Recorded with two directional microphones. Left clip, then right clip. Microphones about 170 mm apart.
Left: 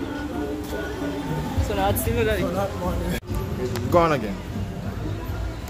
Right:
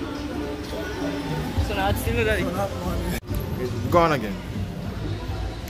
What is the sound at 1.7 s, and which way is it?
Speech, 30° left (ahead or behind).